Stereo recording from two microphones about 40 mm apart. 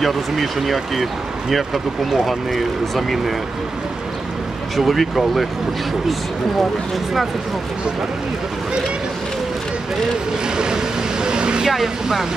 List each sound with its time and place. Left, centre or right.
0.0 s speech: centre
4.7 s speech: centre
10.5 s vehicle: centre
11.6 s speech: centre